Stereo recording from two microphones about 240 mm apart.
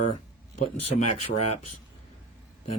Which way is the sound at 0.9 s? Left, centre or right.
Left.